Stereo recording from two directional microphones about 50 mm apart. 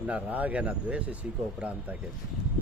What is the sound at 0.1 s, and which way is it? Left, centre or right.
Speech, right.